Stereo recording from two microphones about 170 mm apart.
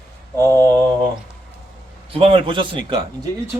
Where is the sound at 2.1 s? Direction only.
35° right (ahead or behind).